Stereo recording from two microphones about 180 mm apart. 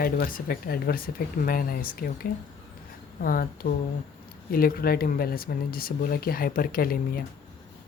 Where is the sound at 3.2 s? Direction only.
55° left (ahead or behind).